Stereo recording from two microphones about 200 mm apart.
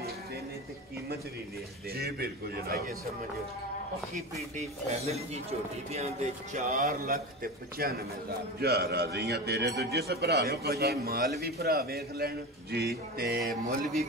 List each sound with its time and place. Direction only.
2.0 s a man's voice: 50° right (ahead or behind)
4.6 s speech: 30° right (ahead or behind)
6.7 s a man's voice: 50° right (ahead or behind)